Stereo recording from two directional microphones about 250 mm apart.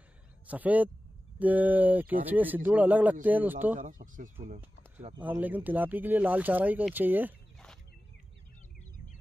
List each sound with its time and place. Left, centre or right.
0.5 s speech: centre
3.7 s speech: right
5.1 s speech: centre